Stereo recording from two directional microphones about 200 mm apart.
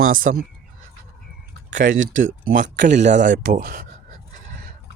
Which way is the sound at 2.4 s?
40° right (ahead or behind).